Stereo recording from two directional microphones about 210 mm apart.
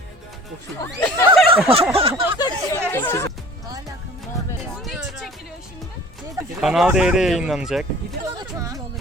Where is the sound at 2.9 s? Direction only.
10° left (ahead or behind).